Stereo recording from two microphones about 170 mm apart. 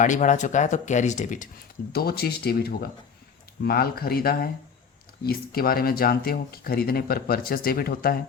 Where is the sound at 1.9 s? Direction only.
65° left (ahead or behind).